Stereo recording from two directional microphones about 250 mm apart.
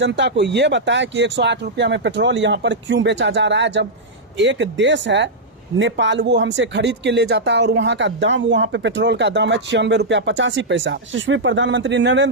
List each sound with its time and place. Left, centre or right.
0.0 s speech: right